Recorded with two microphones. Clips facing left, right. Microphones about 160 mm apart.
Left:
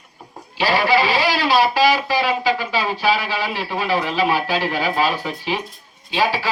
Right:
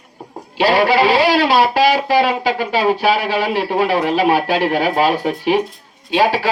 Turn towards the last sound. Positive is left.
turn(degrees=-55)  # may be behind; listen again after turning